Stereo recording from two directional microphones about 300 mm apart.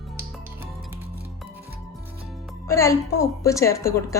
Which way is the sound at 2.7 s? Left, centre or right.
Centre.